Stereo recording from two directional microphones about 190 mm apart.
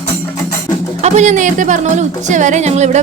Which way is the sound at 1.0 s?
35° right (ahead or behind).